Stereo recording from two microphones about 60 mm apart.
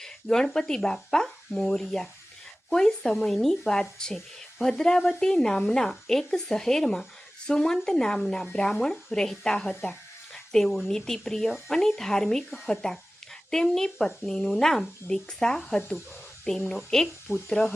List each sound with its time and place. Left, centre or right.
0.0 s speech: centre
17.3 s speech: left